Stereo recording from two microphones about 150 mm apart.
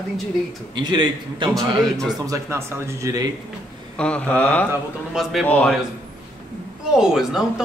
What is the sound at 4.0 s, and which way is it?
Speech, 5° left (ahead or behind).